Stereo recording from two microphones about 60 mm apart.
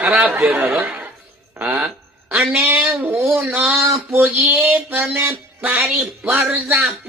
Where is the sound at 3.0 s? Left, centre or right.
Right.